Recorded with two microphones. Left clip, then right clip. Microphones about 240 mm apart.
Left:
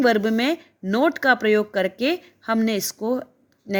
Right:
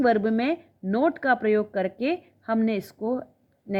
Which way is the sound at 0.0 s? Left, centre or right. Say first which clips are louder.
Left 3 dB; left.